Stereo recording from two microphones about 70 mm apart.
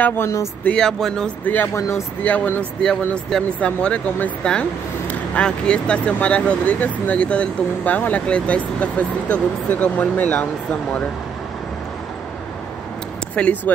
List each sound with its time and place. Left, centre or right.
0.2 s speech: left
0.7 s speech: centre
1.4 s speech: left
1.8 s speech: left
2.2 s speech: left
13.3 s speech: centre